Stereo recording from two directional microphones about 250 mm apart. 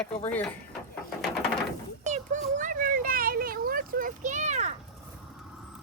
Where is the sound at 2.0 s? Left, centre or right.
Right.